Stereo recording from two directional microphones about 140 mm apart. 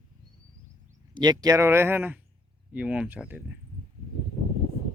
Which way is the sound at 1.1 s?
30° right (ahead or behind).